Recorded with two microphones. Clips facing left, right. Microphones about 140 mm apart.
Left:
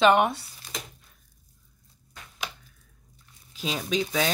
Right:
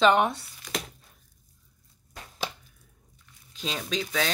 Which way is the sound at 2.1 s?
35° right (ahead or behind).